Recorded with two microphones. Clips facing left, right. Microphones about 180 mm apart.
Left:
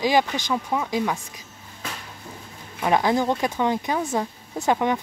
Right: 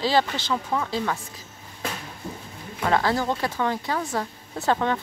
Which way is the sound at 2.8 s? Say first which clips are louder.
Left 2 dB; 15° left (ahead or behind).